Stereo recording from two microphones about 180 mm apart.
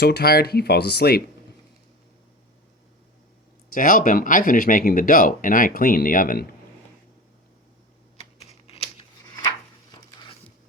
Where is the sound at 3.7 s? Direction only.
50° left (ahead or behind).